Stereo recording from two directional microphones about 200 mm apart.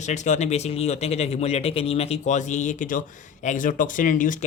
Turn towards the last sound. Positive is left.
turn(degrees=40)  # may be behind; listen again after turning